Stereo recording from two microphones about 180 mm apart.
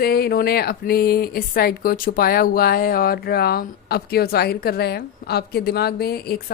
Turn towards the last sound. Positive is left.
turn(degrees=60)  # may be behind; listen again after turning